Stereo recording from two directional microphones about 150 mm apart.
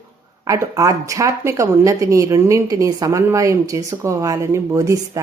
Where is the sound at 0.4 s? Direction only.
20° right (ahead or behind).